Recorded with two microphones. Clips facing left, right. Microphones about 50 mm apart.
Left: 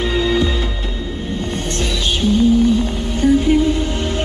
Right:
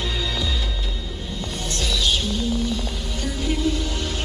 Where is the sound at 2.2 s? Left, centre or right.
Left.